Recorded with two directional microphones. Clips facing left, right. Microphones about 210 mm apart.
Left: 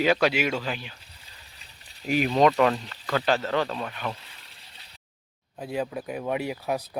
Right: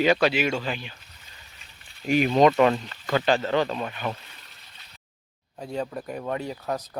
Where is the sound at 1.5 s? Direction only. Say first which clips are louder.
Even; 35° left (ahead or behind).